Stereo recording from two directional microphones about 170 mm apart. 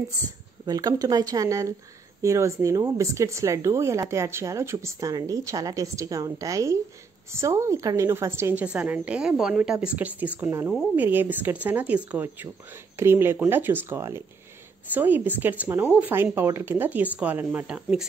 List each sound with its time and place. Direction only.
0.7 s speech: 20° right (ahead or behind); by 18.0 s 5° right (ahead or behind)